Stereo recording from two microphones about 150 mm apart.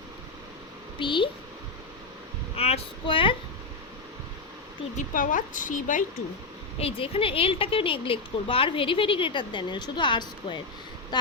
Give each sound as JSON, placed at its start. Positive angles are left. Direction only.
{"t": 0.9, "sound": "speech", "side_deg": 35}
{"t": 2.6, "sound": "speech", "side_deg": 40}
{"t": 4.9, "sound": "a woman's voice", "side_deg": 60}
{"t": 6.7, "sound": "speech", "side_deg": 40}